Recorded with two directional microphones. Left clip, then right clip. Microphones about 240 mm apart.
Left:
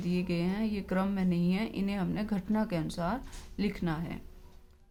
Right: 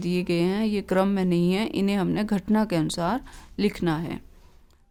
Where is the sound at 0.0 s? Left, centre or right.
Right.